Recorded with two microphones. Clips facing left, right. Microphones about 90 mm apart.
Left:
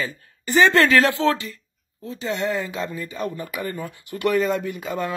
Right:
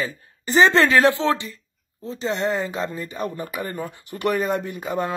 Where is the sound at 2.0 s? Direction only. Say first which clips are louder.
Right 1 dB; 30° right (ahead or behind).